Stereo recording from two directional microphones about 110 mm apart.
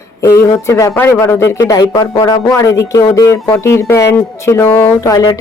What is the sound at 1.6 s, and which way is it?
Speech, 35° left (ahead or behind).